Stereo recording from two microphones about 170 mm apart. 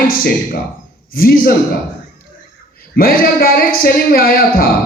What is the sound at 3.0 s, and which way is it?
Speech, 60° left (ahead or behind).